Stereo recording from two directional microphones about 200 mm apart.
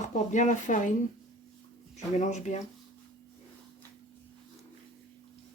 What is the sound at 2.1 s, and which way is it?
Speech, 35° left (ahead or behind).